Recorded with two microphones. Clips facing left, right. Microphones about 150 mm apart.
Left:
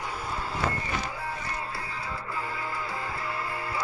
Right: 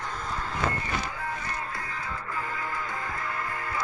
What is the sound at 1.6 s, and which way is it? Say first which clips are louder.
Music: even; 30° left (ahead or behind).